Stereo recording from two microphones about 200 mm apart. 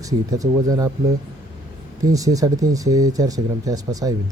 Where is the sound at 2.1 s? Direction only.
15° right (ahead or behind).